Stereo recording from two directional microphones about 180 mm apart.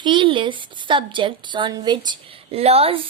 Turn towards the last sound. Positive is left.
turn(degrees=-35)  # may be behind; listen again after turning